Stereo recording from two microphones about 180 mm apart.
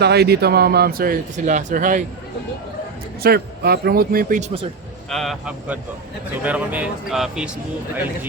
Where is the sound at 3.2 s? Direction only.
60° right (ahead or behind).